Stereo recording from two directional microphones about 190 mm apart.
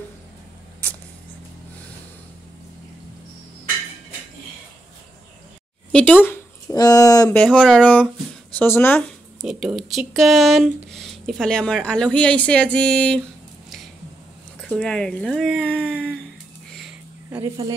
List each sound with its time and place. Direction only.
5.9 s speech: 5° left (ahead or behind)
9.4 s speech: centre (ahead or behind)
14.6 s speech: 5° left (ahead or behind)
16.7 s a sound: centre (ahead or behind)
17.4 s speech: 20° right (ahead or behind)